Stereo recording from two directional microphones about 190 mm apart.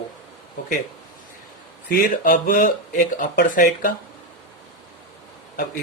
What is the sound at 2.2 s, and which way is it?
Speech, 45° left (ahead or behind).